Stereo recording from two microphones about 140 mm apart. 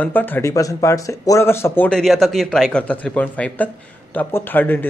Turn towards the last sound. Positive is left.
turn(degrees=15)  # may be behind; listen again after turning